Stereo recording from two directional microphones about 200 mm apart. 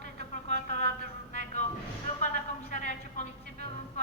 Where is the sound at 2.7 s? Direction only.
35° left (ahead or behind).